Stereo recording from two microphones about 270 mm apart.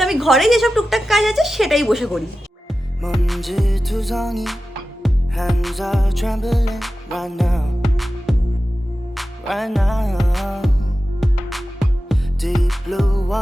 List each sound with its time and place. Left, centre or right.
0.0 s a woman's voice: centre
5.0 s music: centre